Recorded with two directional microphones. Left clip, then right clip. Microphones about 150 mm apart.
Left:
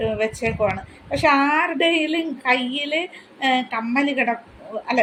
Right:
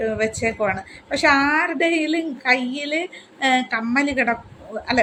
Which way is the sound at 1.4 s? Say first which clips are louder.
Even; centre (ahead or behind).